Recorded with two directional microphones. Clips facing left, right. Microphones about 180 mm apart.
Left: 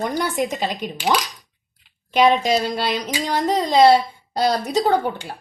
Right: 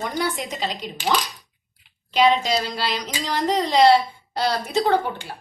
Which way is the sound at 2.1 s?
50° left (ahead or behind).